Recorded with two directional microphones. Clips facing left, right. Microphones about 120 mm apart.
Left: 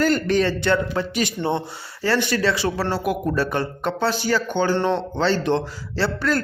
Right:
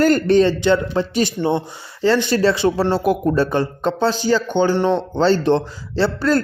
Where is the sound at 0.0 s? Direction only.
45° right (ahead or behind).